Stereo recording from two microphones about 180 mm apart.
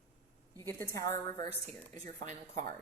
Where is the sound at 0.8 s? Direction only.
15° left (ahead or behind).